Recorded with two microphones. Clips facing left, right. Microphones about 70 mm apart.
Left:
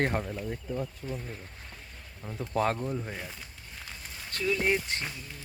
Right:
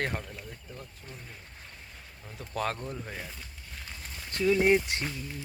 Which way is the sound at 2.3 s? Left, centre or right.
Left.